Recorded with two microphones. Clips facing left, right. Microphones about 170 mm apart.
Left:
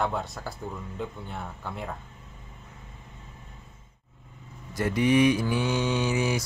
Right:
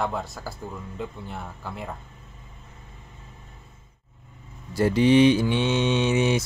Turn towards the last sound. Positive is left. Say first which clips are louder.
# right 4 dB
turn(degrees=-25)  # may be behind; listen again after turning